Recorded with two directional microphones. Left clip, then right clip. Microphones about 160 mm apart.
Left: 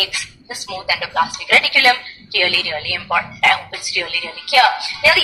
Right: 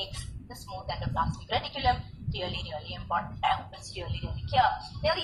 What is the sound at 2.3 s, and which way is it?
Speech, 50° left (ahead or behind).